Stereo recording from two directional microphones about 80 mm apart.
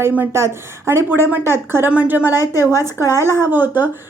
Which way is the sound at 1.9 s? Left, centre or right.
Centre.